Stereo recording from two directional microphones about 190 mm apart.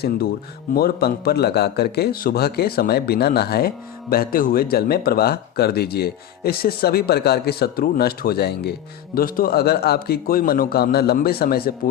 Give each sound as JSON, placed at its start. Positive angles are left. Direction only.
{"t": 0.7, "sound": "speech", "side_deg": 55}